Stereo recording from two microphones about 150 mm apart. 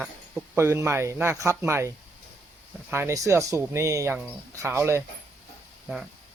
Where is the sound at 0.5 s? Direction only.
15° right (ahead or behind).